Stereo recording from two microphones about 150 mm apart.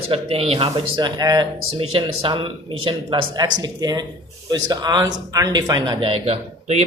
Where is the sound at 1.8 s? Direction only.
40° right (ahead or behind).